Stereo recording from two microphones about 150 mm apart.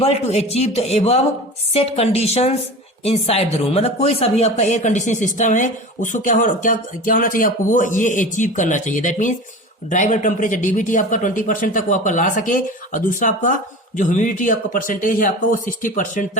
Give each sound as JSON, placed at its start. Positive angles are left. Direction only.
{"t": 0.0, "sound": "a man's voice", "side_deg": 45}